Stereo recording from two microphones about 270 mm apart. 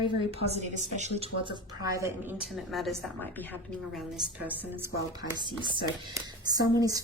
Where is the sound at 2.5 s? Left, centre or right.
Centre.